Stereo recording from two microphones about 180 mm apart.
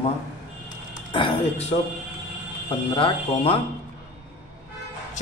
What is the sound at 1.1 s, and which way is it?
Speech, 30° left (ahead or behind).